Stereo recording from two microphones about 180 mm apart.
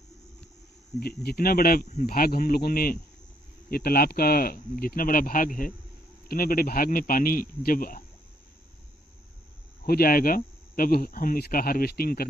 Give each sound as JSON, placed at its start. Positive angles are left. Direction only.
{"t": 0.9, "sound": "speech", "side_deg": 60}
{"t": 9.8, "sound": "speech", "side_deg": 55}